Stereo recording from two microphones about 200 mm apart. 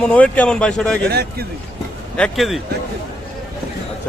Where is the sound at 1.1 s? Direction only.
50° right (ahead or behind).